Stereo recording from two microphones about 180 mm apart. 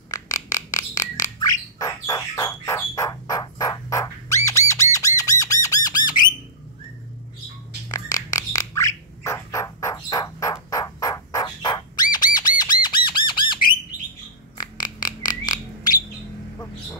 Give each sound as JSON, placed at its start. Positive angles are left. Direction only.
{"t": 0.1, "sound": "a sound", "side_deg": 20}
{"t": 1.8, "sound": "bird", "side_deg": 20}
{"t": 4.5, "sound": "squawk", "side_deg": 15}
{"t": 7.9, "sound": "bird", "side_deg": 20}
{"t": 12.8, "sound": "squawk", "side_deg": 25}
{"t": 14.6, "sound": "a sound", "side_deg": 25}